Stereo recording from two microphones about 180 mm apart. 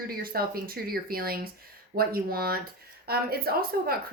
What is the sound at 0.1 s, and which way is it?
A woman's voice, 55° right (ahead or behind).